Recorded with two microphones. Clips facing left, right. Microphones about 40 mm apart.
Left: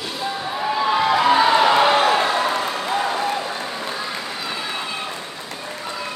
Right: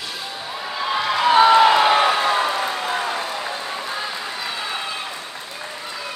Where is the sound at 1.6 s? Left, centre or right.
Centre.